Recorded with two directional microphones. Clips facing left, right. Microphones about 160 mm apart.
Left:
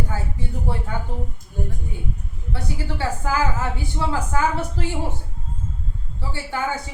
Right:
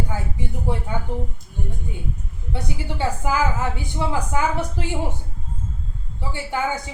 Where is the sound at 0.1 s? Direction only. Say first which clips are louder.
Even; 15° right (ahead or behind).